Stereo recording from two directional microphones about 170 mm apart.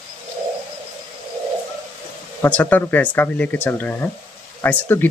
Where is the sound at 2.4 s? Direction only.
10° left (ahead or behind).